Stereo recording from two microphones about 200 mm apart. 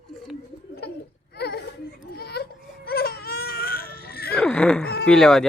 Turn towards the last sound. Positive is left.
turn(degrees=0)  # may be behind; listen again after turning